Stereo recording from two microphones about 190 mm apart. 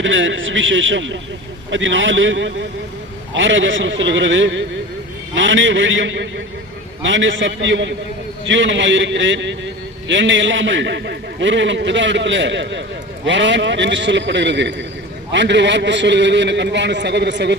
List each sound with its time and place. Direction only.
0.0 s a man's voice: 80° right; by 17.5 s 65° right (ahead or behind)